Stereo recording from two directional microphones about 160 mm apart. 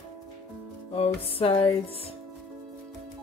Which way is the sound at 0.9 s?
40° left (ahead or behind).